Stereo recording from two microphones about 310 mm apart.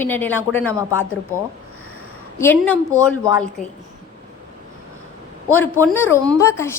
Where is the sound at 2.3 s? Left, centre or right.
Centre.